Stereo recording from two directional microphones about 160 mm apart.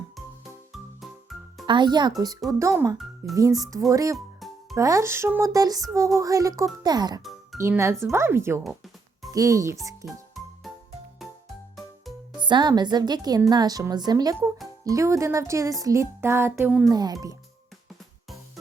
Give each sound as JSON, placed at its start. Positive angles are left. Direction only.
{"t": 0.4, "sound": "music", "side_deg": 0}
{"t": 1.6, "sound": "speech", "side_deg": -30}
{"t": 4.4, "sound": "music", "side_deg": 0}
{"t": 4.8, "sound": "speech", "side_deg": -20}
{"t": 10.1, "sound": "music", "side_deg": 0}
{"t": 12.4, "sound": "speech", "side_deg": -30}
{"t": 16.9, "sound": "speech", "side_deg": -25}